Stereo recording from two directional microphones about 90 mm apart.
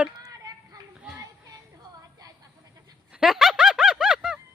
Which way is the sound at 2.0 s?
45° right (ahead or behind).